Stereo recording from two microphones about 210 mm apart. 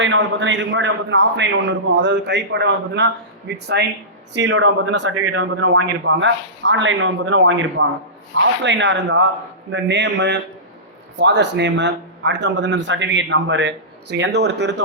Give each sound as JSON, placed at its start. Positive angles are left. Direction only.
{"t": 0.0, "sound": "a man's voice", "side_deg": -60}